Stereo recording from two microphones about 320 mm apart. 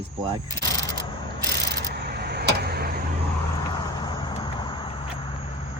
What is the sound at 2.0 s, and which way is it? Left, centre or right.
Vehicle, right.